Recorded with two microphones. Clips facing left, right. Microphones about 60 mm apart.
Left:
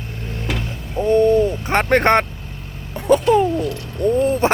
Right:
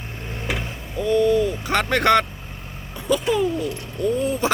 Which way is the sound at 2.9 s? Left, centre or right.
Left.